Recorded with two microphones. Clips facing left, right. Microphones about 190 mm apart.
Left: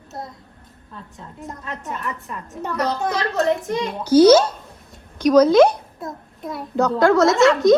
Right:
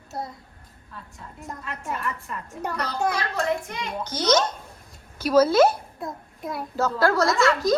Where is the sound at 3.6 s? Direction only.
45° left (ahead or behind).